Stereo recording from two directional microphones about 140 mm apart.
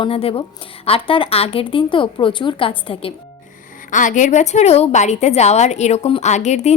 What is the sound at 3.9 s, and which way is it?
A woman's voice, 65° left (ahead or behind).